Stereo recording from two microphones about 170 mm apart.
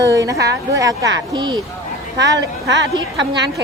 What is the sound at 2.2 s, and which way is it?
Speech, 90° right.